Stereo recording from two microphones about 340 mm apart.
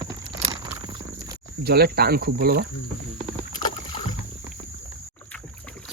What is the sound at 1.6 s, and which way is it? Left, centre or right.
Speech, right.